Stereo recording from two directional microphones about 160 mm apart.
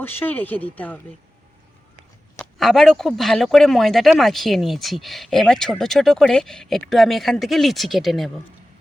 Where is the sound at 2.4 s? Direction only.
Centre (ahead or behind).